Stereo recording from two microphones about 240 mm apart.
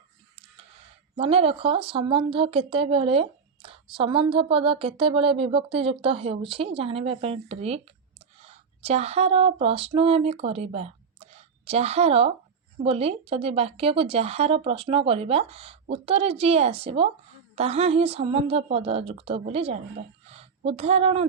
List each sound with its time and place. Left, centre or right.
1.1 s speech: right
20.2 s a sound: right
20.7 s speech: right